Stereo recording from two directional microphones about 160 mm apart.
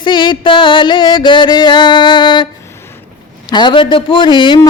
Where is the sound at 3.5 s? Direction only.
30° left (ahead or behind).